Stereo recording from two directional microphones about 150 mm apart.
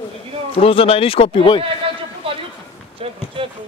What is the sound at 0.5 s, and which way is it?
Speech, 40° left (ahead or behind).